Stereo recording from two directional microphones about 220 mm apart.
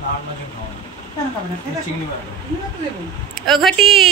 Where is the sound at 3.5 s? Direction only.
Centre (ahead or behind).